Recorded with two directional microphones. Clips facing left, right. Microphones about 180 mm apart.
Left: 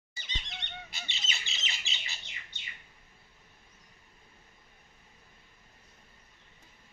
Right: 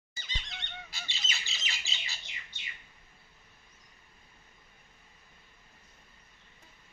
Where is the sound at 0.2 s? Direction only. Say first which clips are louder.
Left 1 dB; 20° left (ahead or behind).